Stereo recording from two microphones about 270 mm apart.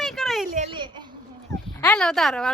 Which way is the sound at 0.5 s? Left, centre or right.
Right.